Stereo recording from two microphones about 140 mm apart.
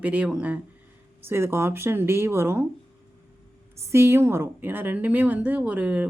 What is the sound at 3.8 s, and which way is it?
A woman's voice, 20° right (ahead or behind).